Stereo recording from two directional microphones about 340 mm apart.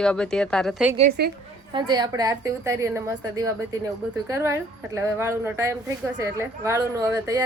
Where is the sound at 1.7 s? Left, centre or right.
Centre.